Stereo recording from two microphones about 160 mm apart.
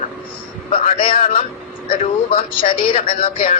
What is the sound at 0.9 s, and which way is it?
Speech, 35° left (ahead or behind).